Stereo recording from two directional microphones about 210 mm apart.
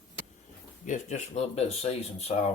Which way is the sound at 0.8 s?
35° left (ahead or behind).